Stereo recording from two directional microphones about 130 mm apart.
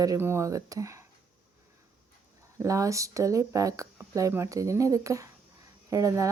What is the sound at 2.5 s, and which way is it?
A woman's voice, 25° right (ahead or behind).